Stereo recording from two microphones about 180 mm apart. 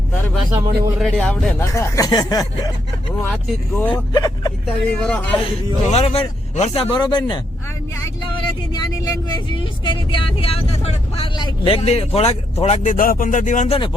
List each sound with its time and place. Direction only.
0.5 s speech: 5° right (ahead or behind); by 2.7 s 20° left (ahead or behind)
3.2 s speech: 10° left (ahead or behind)
3.9 s speech: 20° left (ahead or behind)
4.6 s speech: 5° left (ahead or behind)
5.9 s speech: 35° left (ahead or behind)
6.9 s speech: 25° left (ahead or behind)
9.3 s speech: 25° left (ahead or behind); by 13.7 s 45° left (ahead or behind)